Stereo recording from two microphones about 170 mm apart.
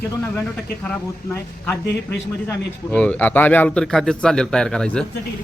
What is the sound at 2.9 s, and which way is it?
A man's voice, 5° left (ahead or behind).